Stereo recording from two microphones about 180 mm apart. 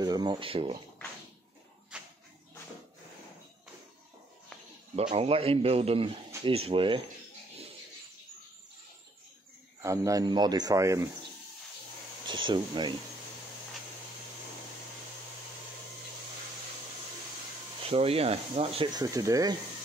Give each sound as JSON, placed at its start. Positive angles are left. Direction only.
{"t": 0.0, "sound": "speech", "side_deg": -25}
{"t": 1.9, "sound": "a sound", "side_deg": -5}
{"t": 4.9, "sound": "a man's voice", "side_deg": -35}
{"t": 9.8, "sound": "speech", "side_deg": -15}
{"t": 12.3, "sound": "speech", "side_deg": -25}
{"t": 17.8, "sound": "a man's voice", "side_deg": -35}
{"t": 18.9, "sound": "speech", "side_deg": -20}